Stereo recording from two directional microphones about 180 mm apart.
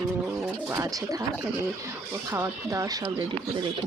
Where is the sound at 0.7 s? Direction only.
20° right (ahead or behind).